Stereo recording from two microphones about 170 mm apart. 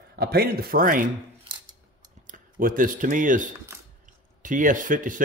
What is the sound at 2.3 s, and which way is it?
Speech, 55° right (ahead or behind).